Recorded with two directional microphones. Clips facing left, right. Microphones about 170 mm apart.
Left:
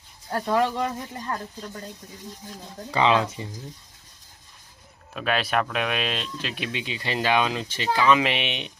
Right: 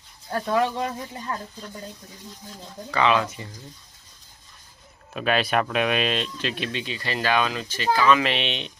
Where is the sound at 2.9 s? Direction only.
20° left (ahead or behind).